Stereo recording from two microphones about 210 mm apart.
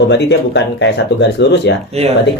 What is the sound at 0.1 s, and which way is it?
Speech, 55° left (ahead or behind).